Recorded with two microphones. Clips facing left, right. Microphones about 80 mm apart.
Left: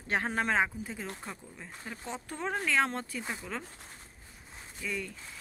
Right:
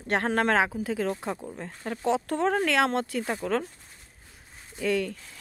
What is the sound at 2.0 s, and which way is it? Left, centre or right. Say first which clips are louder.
Speech: right 12 dB; right.